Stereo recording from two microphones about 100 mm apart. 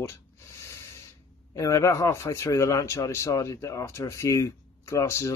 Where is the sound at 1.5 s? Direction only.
30° left (ahead or behind).